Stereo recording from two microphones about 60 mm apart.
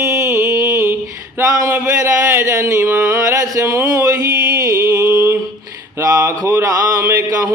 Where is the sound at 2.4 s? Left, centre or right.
Right.